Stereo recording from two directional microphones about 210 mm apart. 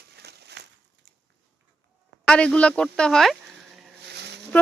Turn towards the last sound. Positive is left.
turn(degrees=-55)  # may be behind; listen again after turning